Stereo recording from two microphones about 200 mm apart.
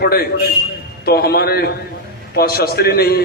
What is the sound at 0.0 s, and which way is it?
A man's voice, 50° left (ahead or behind).